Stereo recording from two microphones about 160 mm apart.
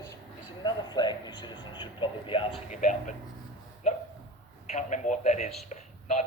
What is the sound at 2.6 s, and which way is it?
Speech, 50° left (ahead or behind).